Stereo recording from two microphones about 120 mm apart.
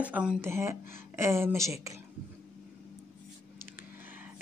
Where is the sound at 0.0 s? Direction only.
10° right (ahead or behind).